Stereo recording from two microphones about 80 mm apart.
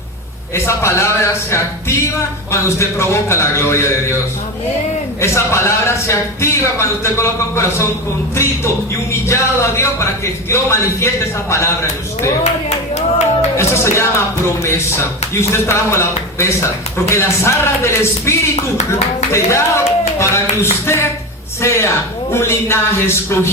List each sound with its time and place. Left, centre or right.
0.5 s a man's voice: left
5.2 s a man's voice: left
9.2 s a man's voice: left
13.6 s a man's voice: left